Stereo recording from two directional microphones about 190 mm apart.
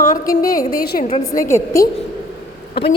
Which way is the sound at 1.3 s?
15° left (ahead or behind).